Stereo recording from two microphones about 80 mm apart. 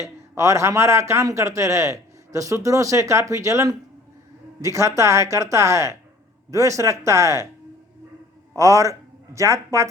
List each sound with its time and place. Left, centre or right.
0.0 s a man's voice: right
8.5 s speech: right